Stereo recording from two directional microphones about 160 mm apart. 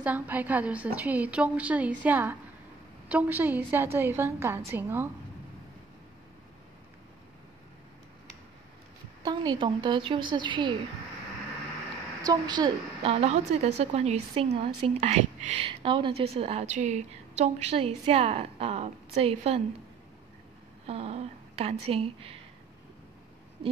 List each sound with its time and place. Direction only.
0.0 s a woman's voice: 10° right (ahead or behind)
9.2 s a woman's voice: 25° right (ahead or behind)
12.2 s a woman's voice: 25° right (ahead or behind)
20.8 s a woman's voice: 40° right (ahead or behind)